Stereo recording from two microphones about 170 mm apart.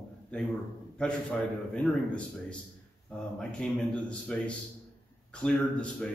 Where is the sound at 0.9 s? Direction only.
5° left (ahead or behind).